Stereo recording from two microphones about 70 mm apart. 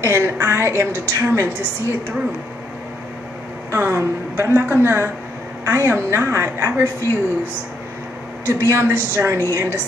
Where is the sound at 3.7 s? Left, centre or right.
Right.